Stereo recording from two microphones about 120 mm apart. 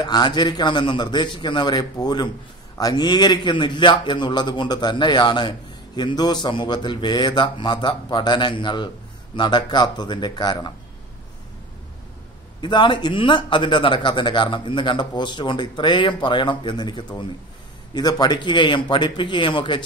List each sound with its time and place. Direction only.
0.0 s speech: 35° left (ahead or behind)
12.6 s speech: 40° left (ahead or behind)